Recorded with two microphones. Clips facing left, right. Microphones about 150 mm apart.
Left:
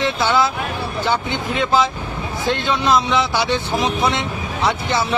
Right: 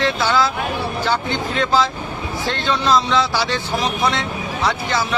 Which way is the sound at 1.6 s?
20° left (ahead or behind).